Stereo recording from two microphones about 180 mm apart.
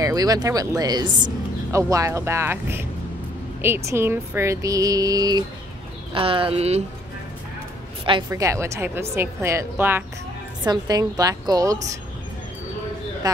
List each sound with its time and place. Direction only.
0.0 s a woman's voice: 20° right (ahead or behind)
8.0 s speech: 25° right (ahead or behind)
8.3 s a woman's voice: 15° right (ahead or behind)